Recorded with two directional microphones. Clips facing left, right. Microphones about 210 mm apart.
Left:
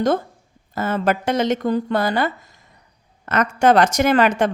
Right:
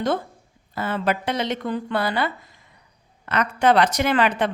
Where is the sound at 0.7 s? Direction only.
45° left (ahead or behind).